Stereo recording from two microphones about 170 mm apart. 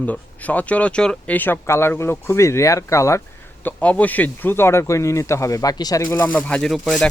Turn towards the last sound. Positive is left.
turn(degrees=5)  # may be behind; listen again after turning